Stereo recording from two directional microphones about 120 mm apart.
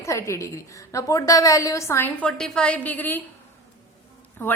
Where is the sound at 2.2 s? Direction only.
5° left (ahead or behind).